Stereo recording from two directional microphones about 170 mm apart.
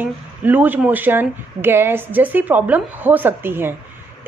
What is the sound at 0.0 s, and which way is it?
Speech, 10° right (ahead or behind).